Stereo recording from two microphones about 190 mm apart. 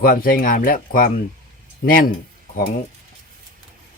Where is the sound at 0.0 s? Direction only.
50° left (ahead or behind).